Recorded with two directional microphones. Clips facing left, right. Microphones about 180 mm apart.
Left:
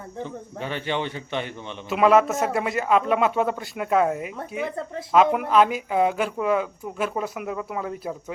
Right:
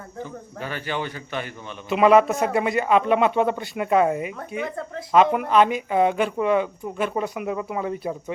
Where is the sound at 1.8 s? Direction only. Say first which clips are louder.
Right 2 dB; centre (ahead or behind).